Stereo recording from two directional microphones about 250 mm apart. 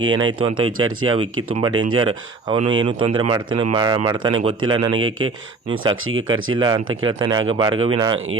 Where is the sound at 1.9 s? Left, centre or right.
Centre.